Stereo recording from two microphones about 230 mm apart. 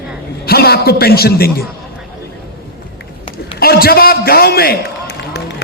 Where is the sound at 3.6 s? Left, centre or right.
Left.